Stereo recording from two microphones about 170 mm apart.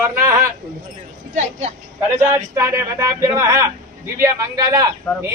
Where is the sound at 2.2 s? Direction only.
15° right (ahead or behind).